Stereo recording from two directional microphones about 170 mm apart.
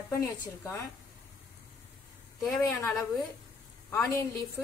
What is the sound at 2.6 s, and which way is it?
Speech, 15° left (ahead or behind).